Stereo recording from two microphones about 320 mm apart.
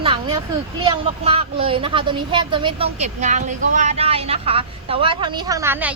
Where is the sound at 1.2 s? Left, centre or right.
Centre.